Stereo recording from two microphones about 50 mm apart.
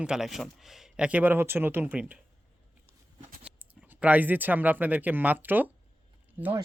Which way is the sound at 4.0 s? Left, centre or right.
Right.